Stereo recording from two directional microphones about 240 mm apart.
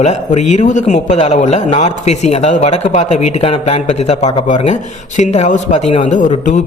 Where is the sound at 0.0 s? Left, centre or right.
Left.